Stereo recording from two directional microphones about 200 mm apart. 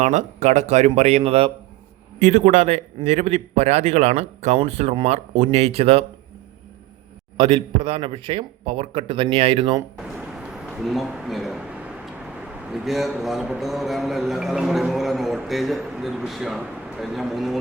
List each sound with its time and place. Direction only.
0.0 s a man's voice: 35° right (ahead or behind)
7.3 s speech: 25° right (ahead or behind)
10.2 s a sound: 5° right (ahead or behind)
12.7 s a man's voice: centre (ahead or behind)